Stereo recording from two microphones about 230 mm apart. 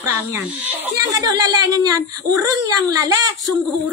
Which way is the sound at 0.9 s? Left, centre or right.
Centre.